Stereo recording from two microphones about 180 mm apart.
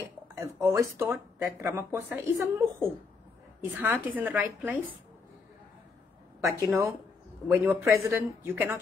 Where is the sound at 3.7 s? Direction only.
10° right (ahead or behind).